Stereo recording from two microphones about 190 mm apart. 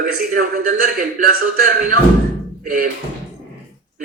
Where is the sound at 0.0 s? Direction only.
45° right (ahead or behind).